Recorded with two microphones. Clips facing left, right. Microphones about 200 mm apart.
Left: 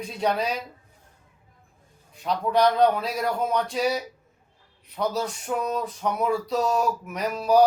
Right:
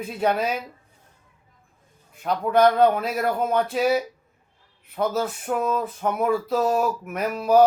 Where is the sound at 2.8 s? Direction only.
5° right (ahead or behind).